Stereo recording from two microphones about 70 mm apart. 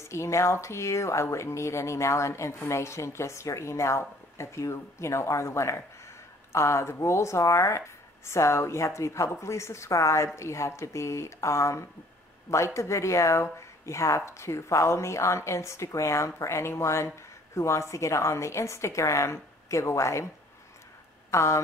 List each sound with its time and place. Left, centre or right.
0.0 s speech: left
21.3 s speech: left